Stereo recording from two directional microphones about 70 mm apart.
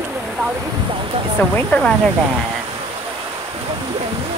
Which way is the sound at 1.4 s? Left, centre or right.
Centre.